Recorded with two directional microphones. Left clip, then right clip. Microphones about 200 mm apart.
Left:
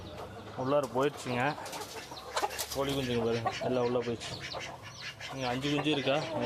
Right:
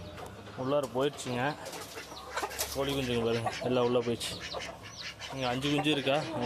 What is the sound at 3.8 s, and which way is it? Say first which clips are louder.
Speech: right 4 dB; 20° right (ahead or behind).